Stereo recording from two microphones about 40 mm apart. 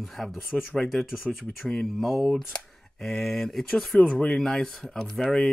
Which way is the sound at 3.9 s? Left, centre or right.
Left.